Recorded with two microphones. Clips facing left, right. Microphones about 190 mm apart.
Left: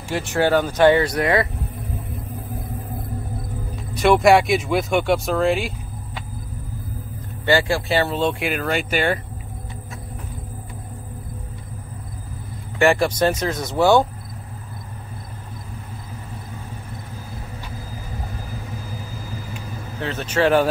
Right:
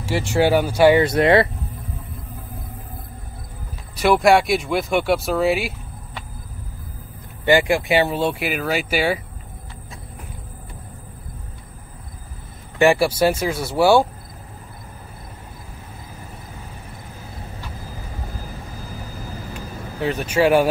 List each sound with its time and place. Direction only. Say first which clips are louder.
0.1 s speech: right 1 dB; 10° right (ahead or behind)
1.0 s speech: right 4 dB; 25° right (ahead or behind)
3.9 s speech: left 1 dB; centre (ahead or behind)
7.4 s speech: right 2 dB; 15° right (ahead or behind)
12.7 s speech: right 1 dB; 15° right (ahead or behind)
20.0 s speech: right 2 dB; 15° right (ahead or behind)